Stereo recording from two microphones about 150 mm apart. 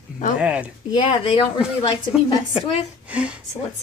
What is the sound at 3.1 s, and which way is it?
Speech, 10° right (ahead or behind).